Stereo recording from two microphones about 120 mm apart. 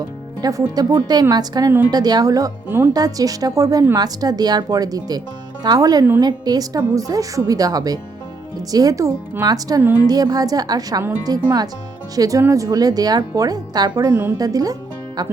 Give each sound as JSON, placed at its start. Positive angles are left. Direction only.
{"t": 0.4, "sound": "speech", "side_deg": -35}
{"t": 2.6, "sound": "speech", "side_deg": -20}
{"t": 2.9, "sound": "speech", "side_deg": -30}
{"t": 9.8, "sound": "a woman's voice", "side_deg": -15}
{"t": 10.1, "sound": "speech", "side_deg": -30}
{"t": 14.1, "sound": "a woman's voice", "side_deg": -15}
{"t": 14.3, "sound": "speech", "side_deg": -30}